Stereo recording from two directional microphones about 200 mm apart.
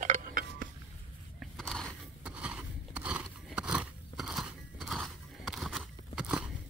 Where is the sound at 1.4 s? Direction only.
Centre (ahead or behind).